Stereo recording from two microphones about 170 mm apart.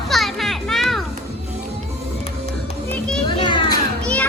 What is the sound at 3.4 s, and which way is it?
Children playing, 25° left (ahead or behind).